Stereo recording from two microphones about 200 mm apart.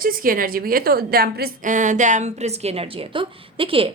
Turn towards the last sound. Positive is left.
turn(degrees=-25)  # may be behind; listen again after turning